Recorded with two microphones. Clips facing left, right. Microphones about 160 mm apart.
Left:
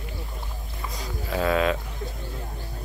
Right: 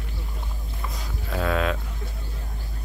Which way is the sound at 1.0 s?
Centre (ahead or behind).